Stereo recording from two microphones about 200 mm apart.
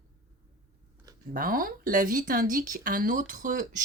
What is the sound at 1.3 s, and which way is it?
Speech, 45° right (ahead or behind).